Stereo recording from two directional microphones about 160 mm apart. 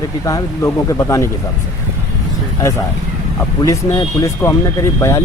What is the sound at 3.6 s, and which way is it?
Speech, 20° left (ahead or behind).